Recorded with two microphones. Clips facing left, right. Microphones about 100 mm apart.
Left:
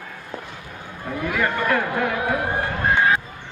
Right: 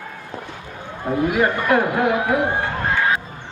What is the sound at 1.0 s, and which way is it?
A man's voice, 25° right (ahead or behind).